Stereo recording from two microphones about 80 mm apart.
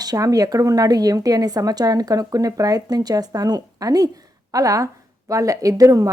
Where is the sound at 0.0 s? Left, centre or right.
Right.